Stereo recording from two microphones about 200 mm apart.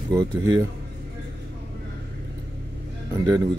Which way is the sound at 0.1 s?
15° right (ahead or behind).